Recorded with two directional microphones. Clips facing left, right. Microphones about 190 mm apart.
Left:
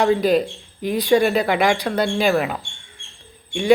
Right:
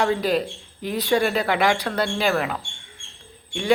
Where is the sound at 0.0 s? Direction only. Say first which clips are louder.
Left 5 dB; 15° left (ahead or behind).